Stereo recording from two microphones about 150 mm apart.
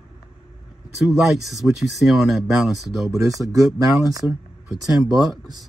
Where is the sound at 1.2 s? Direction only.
Centre (ahead or behind).